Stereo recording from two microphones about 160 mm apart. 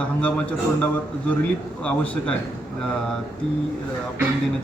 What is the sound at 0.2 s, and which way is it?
Speech, 10° left (ahead or behind).